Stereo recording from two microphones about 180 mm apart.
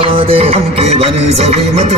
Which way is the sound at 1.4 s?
35° right (ahead or behind).